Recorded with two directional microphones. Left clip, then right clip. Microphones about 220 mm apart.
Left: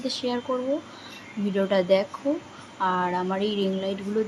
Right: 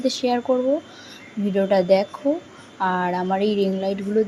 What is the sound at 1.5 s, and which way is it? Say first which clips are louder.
A woman's voice: right 4 dB; 15° right (ahead or behind).